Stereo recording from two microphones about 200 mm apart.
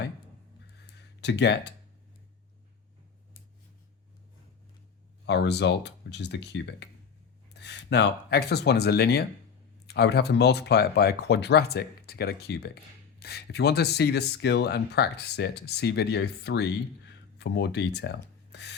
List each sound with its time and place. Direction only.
1.2 s speech: 60° left (ahead or behind)
5.2 s speech: 60° left (ahead or behind)